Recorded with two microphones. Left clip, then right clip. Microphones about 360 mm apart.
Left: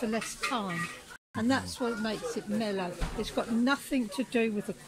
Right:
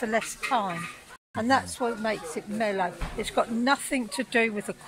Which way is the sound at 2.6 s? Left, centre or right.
Centre.